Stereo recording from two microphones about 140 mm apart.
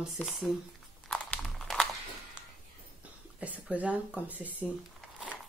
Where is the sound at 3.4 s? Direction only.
10° right (ahead or behind).